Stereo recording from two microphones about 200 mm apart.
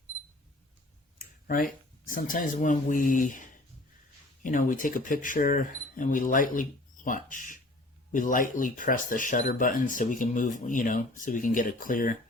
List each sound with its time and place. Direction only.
1.5 s speech: 45° left (ahead or behind)